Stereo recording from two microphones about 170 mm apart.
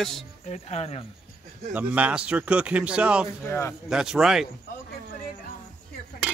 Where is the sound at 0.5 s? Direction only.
40° left (ahead or behind).